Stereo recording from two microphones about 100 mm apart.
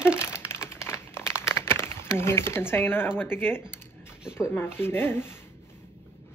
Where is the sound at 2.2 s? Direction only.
25° left (ahead or behind).